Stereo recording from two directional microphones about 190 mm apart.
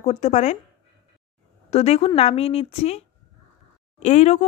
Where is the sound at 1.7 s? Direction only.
35° left (ahead or behind).